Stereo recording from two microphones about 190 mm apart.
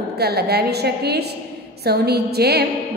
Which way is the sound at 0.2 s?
55° right (ahead or behind).